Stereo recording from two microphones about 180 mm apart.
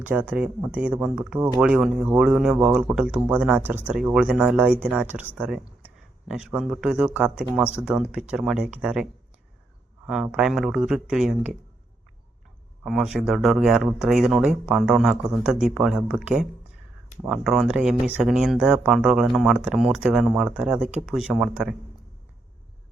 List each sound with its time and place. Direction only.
0.0 s speech: 10° right (ahead or behind)
10.3 s speech: centre (ahead or behind)
12.8 s speech: centre (ahead or behind)